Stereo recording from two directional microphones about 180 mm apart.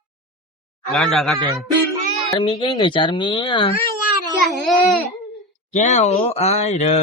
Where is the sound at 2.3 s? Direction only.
25° left (ahead or behind).